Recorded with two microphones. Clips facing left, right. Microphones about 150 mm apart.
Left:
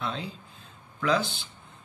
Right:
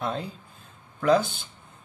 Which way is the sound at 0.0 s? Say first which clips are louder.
Right 3 dB; 50° right (ahead or behind).